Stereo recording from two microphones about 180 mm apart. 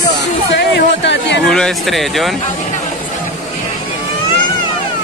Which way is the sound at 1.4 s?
Centre (ahead or behind).